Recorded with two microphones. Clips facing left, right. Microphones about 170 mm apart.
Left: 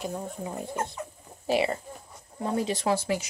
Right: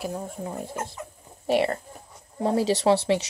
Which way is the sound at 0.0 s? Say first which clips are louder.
Right 2 dB; 5° right (ahead or behind).